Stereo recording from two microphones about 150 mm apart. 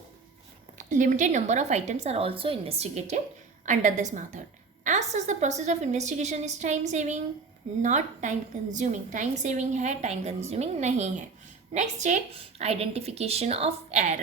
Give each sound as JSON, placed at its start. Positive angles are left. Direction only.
{"t": 0.8, "sound": "a woman's voice", "side_deg": -55}